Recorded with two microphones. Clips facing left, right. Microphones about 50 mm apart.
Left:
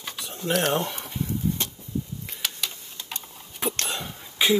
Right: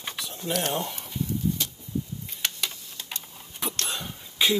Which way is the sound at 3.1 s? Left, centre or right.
Left.